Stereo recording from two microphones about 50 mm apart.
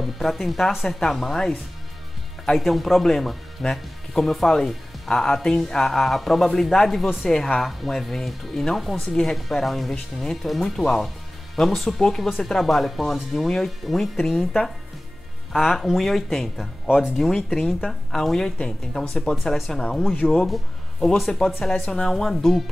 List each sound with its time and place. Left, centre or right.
0.0 s speech: centre
16.8 s speech: centre
17.2 s speech: centre